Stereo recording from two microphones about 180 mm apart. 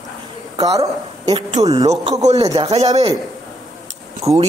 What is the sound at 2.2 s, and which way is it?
Speech, 35° right (ahead or behind).